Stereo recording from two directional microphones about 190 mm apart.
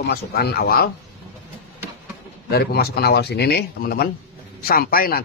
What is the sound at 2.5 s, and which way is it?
Speech, 55° left (ahead or behind).